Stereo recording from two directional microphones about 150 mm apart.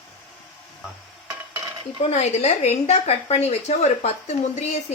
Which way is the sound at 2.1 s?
50° left (ahead or behind).